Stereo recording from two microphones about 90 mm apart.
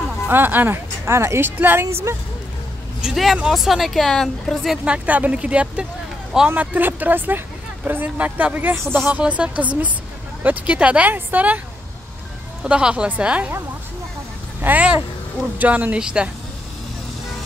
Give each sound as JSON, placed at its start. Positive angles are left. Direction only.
{"t": 0.3, "sound": "speech", "side_deg": -20}
{"t": 3.0, "sound": "speech", "side_deg": -5}
{"t": 4.8, "sound": "speech", "side_deg": -15}
{"t": 12.6, "sound": "speech", "side_deg": -10}
{"t": 14.6, "sound": "speech", "side_deg": -15}